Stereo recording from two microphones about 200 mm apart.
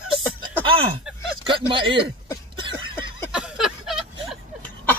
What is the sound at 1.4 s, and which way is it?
Speech, 25° right (ahead or behind).